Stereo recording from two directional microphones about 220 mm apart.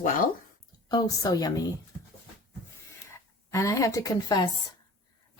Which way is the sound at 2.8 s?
15° left (ahead or behind).